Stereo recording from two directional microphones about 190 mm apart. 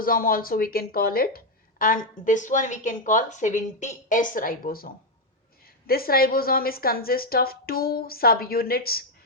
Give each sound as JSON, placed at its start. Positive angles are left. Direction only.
{"t": 0.0, "sound": "a woman's voice", "side_deg": 50}